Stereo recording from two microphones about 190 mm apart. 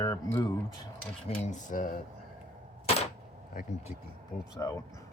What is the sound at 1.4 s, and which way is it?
Speech, 40° left (ahead or behind).